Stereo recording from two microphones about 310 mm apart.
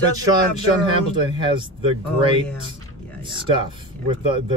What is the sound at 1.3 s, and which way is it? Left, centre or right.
Speech, centre.